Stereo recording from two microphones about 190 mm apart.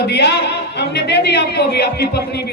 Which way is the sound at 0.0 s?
65° left (ahead or behind).